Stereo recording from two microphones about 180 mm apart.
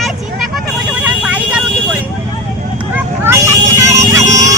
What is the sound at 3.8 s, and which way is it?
Music, 15° right (ahead or behind).